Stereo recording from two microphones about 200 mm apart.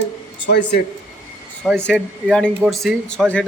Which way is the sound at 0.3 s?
60° left (ahead or behind).